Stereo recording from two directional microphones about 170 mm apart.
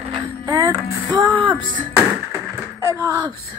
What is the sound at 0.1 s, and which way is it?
Music, 25° right (ahead or behind).